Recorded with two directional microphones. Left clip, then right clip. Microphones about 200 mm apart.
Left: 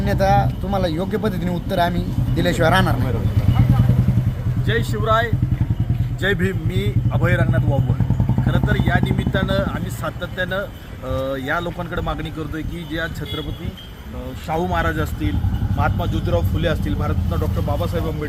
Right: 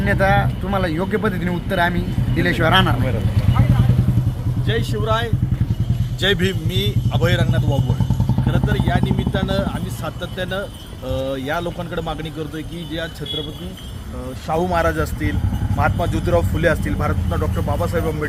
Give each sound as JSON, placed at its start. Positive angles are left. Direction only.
{"t": 0.0, "sound": "speech", "side_deg": 20}
{"t": 4.6, "sound": "speech", "side_deg": -10}
{"t": 14.5, "sound": "speech", "side_deg": -25}